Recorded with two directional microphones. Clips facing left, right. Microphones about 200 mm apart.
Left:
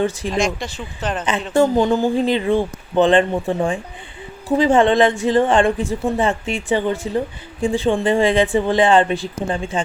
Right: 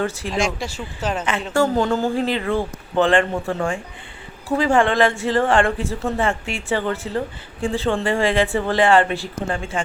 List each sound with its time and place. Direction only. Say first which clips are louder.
0.0 s a woman's voice: left 4 dB; 15° left (ahead or behind)
0.3 s speech: left 2 dB; 5° right (ahead or behind)
1.5 s a woman's voice: left 4 dB; 15° left (ahead or behind)